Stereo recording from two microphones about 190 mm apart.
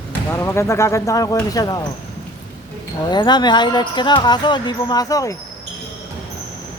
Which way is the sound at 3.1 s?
20° left (ahead or behind).